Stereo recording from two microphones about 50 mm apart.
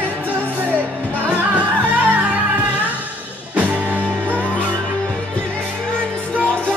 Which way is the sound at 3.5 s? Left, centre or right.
Right.